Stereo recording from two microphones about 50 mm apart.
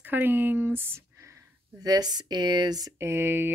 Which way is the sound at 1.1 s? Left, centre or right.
Right.